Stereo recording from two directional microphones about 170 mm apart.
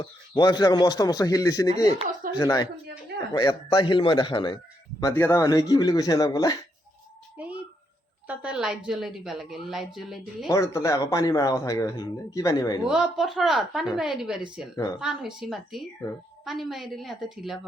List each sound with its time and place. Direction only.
0.0 s speech: 25° left (ahead or behind)
8.3 s a woman's voice: 5° right (ahead or behind)
10.5 s speech: 15° left (ahead or behind)
12.8 s a woman's voice: 5° right (ahead or behind)